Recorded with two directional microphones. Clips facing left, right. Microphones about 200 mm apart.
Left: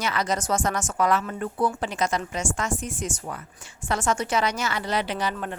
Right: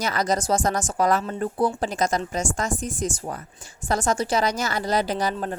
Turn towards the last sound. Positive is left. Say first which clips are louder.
# right 3 dB
turn(degrees=-40)  # may be behind; listen again after turning